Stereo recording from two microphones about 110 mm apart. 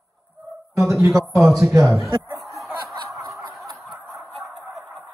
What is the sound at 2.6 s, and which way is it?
Snicker, centre (ahead or behind).